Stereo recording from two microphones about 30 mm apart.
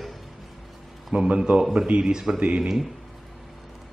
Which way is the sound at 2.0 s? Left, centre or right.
Centre.